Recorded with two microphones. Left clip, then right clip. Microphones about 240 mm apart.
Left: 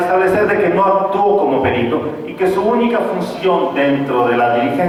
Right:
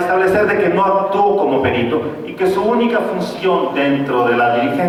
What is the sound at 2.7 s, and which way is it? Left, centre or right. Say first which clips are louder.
A man's voice: left 1 dB; centre.